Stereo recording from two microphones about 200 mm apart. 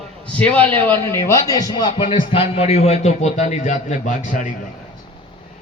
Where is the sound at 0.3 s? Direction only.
5° left (ahead or behind); by 4.5 s 40° left (ahead or behind).